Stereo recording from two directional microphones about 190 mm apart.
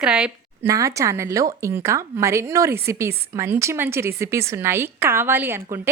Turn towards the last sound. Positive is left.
turn(degrees=-10)  # may be behind; listen again after turning